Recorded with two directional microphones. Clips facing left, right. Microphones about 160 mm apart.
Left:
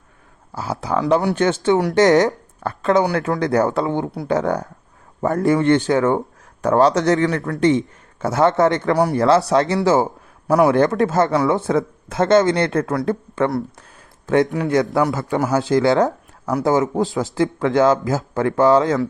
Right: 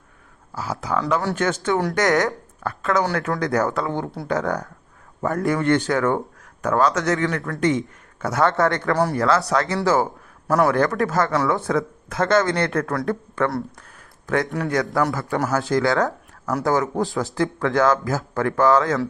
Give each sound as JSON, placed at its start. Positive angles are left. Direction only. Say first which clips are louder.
{"t": 0.5, "sound": "speech", "louder": "left 3 dB", "side_deg": 30}
{"t": 6.6, "sound": "speech", "louder": "left 5 dB", "side_deg": 30}
{"t": 9.1, "sound": "speech", "louder": "left 5 dB", "side_deg": 25}
{"t": 14.6, "sound": "speech", "louder": "left 4 dB", "side_deg": 20}